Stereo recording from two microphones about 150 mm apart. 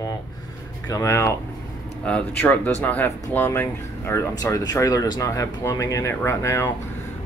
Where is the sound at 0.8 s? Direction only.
20° left (ahead or behind).